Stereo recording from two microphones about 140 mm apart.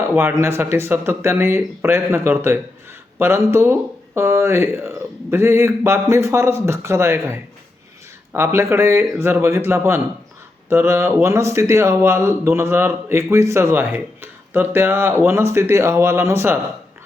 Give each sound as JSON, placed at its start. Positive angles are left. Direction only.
{"t": 0.0, "sound": "speech", "side_deg": -15}